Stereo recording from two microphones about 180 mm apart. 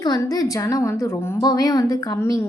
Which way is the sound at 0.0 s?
20° left (ahead or behind).